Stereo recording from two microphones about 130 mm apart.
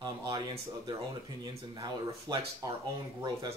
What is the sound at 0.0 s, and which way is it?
Speech, 35° right (ahead or behind).